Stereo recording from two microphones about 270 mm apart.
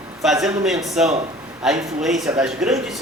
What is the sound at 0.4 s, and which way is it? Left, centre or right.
Speech, centre.